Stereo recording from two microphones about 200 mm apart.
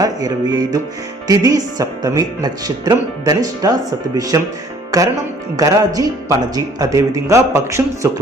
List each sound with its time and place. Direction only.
0.0 s speech: 20° right (ahead or behind)
4.9 s music: 20° right (ahead or behind)
5.5 s speech: 20° right (ahead or behind)